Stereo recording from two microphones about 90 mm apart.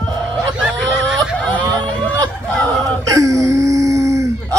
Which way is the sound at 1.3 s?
15° left (ahead or behind).